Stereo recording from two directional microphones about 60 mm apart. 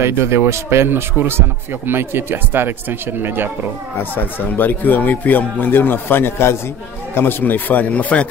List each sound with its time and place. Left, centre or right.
0.0 s speech: right
4.0 s speech: left